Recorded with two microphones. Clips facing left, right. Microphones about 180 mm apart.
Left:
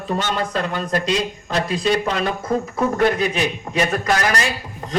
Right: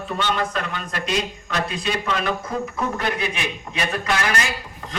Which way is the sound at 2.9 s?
35° left (ahead or behind).